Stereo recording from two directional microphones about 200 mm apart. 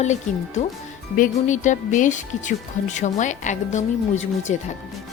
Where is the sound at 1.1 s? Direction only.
40° left (ahead or behind).